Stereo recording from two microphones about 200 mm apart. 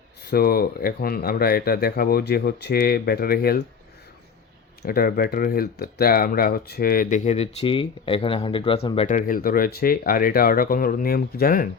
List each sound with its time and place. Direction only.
0.3 s speech: 50° left (ahead or behind)
4.8 s speech: 50° left (ahead or behind)